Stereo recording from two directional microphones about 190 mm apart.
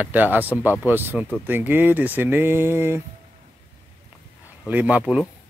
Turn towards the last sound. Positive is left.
turn(degrees=-5)  # may be behind; listen again after turning